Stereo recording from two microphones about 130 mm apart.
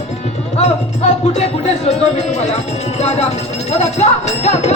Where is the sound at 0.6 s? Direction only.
55° left (ahead or behind).